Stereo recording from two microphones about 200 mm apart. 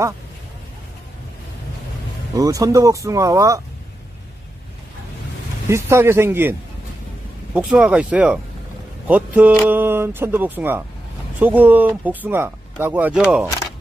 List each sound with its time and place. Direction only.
2.3 s speech: 15° right (ahead or behind)
5.7 s speech: 15° right (ahead or behind)
7.5 s speech: 5° right (ahead or behind)